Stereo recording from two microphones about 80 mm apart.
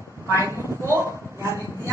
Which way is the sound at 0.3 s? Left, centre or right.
Right.